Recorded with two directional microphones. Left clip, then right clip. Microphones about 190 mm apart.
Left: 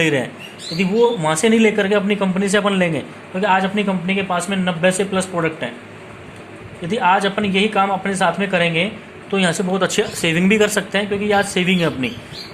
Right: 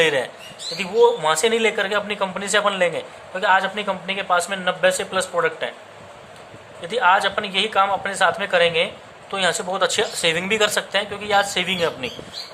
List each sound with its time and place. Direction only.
0.0 s speech: centre (ahead or behind)
6.8 s speech: centre (ahead or behind)